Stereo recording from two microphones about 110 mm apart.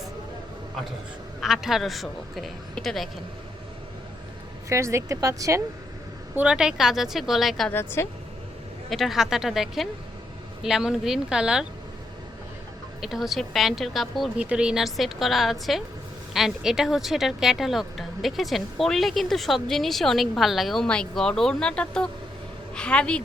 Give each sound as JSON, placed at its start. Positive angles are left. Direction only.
{"t": 1.4, "sound": "speech", "side_deg": 0}
{"t": 4.7, "sound": "speech", "side_deg": -25}
{"t": 6.3, "sound": "speech", "side_deg": -10}
{"t": 7.7, "sound": "a woman's voice", "side_deg": 20}
{"t": 8.9, "sound": "speech", "side_deg": 0}
{"t": 13.0, "sound": "a woman's voice", "side_deg": -5}